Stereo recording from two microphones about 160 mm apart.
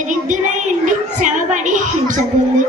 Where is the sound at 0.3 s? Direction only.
50° right (ahead or behind).